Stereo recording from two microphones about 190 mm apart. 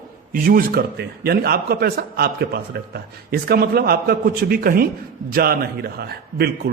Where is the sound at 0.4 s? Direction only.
50° right (ahead or behind).